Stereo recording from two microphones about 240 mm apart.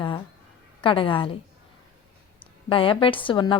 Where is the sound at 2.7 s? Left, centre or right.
Left.